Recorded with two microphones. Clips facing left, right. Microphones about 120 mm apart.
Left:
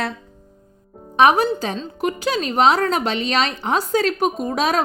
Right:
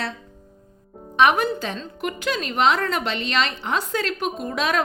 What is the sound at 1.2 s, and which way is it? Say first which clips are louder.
A woman's voice: left 3 dB; 35° left (ahead or behind).